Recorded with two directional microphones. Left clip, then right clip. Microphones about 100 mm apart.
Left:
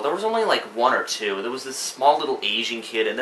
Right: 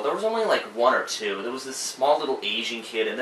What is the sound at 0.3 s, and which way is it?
Speech, 20° left (ahead or behind).